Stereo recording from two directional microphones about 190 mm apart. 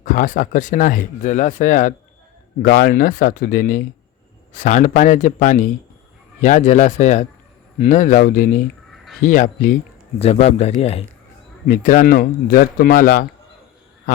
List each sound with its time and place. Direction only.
0.0 s speech: 45° left (ahead or behind)
11.7 s speech: 45° left (ahead or behind)